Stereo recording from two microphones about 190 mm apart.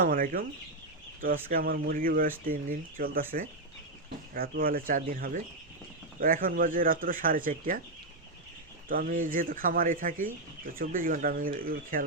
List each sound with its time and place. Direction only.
0.0 s speech: 45° right (ahead or behind)
4.4 s speech: 50° right (ahead or behind)
8.9 s speech: 45° right (ahead or behind)